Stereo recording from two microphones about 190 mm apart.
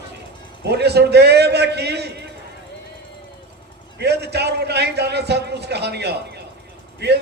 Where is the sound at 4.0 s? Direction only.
60° right (ahead or behind).